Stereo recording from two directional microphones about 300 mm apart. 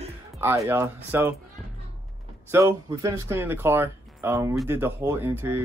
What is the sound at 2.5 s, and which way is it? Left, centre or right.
Speech, centre.